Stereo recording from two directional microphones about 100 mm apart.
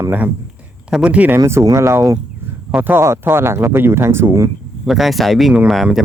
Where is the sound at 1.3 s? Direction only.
30° right (ahead or behind).